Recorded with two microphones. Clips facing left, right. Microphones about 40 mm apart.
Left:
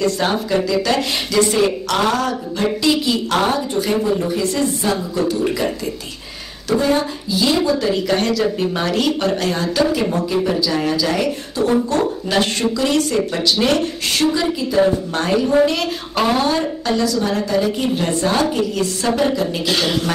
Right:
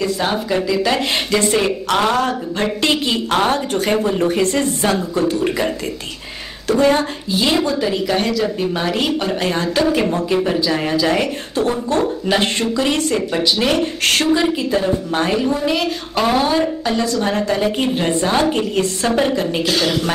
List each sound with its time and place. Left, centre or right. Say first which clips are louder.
0.0 s a woman's voice: left 1 dB; centre
2.6 s speech: left 1 dB; right
6.8 s speech: right 5 dB; right
7.6 s a woman's voice: left 1 dB; centre
9.4 s a woman's voice: even; right
12.8 s speech: left 1 dB; right
14.0 s a sound: right 2 dB; right
14.3 s a woman's voice: right 3 dB; right
15.1 s speech: left 4 dB; centre
17.0 s a woman's voice: right 1 dB; right
19.6 s a man's voice: right 1 dB; centre